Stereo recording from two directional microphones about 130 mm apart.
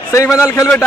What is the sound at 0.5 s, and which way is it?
Speech, 25° left (ahead or behind).